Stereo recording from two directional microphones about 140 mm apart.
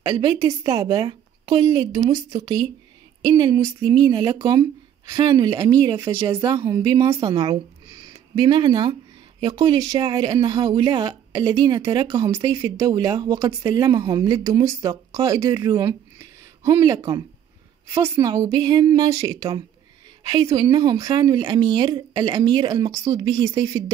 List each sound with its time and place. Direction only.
0.0 s speech: 25° right (ahead or behind)
0.8 s speech: 35° right (ahead or behind)